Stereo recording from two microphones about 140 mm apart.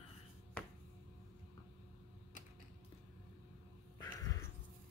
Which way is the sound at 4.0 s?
25° left (ahead or behind).